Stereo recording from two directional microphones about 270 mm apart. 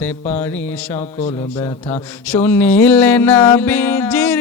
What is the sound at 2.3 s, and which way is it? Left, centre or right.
Music, centre.